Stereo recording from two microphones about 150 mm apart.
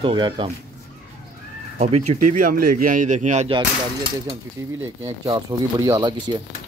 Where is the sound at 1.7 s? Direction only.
45° right (ahead or behind).